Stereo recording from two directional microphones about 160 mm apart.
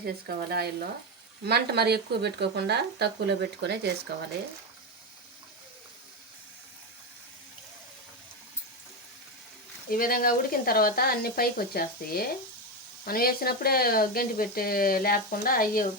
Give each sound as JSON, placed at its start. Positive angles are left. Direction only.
{"t": 0.0, "sound": "speech", "side_deg": -75}
{"t": 1.5, "sound": "speech", "side_deg": -90}
{"t": 9.9, "sound": "speech", "side_deg": 65}